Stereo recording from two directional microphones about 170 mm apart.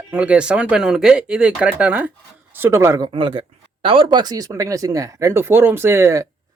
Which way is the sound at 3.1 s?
30° right (ahead or behind).